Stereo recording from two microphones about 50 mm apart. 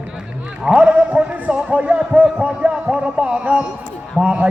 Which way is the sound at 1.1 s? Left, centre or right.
Right.